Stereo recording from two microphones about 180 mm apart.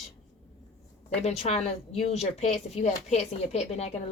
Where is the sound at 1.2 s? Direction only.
35° left (ahead or behind).